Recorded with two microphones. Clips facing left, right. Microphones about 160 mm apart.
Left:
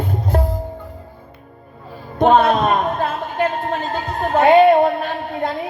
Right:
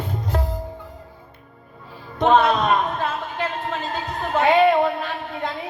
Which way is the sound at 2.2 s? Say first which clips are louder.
Left 3 dB; 50° left (ahead or behind).